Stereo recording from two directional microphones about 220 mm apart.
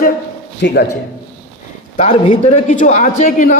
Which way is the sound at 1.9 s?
30° left (ahead or behind).